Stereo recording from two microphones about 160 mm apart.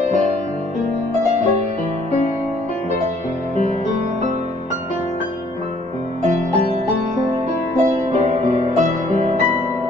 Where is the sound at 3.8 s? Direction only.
45° right (ahead or behind).